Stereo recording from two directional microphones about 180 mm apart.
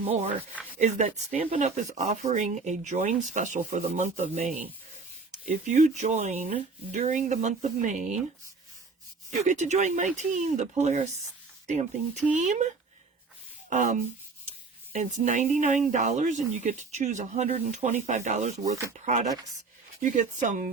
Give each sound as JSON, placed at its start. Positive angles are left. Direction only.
{"t": 0.8, "sound": "speech", "side_deg": -40}
{"t": 9.4, "sound": "speech", "side_deg": -40}
{"t": 13.7, "sound": "a sound", "side_deg": -45}
{"t": 14.9, "sound": "speech", "side_deg": -45}